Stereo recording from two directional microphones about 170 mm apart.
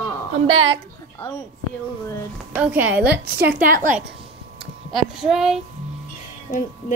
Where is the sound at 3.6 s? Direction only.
55° right (ahead or behind).